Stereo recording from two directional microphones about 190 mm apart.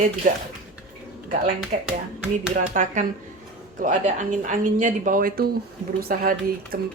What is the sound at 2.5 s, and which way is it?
A woman's voice, 40° right (ahead or behind).